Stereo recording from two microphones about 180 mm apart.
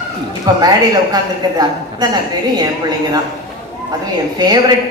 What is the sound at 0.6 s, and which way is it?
A woman's voice, 20° right (ahead or behind).